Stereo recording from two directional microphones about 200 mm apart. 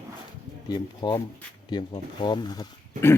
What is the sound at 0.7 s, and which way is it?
Speech, 20° left (ahead or behind).